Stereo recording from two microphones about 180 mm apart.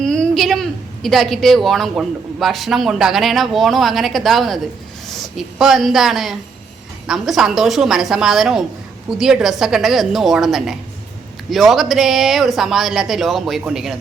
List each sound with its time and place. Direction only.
0.0 s a woman's voice: 5° left (ahead or behind)